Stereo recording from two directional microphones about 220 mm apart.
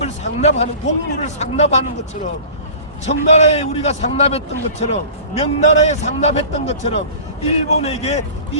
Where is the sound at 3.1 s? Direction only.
30° left (ahead or behind).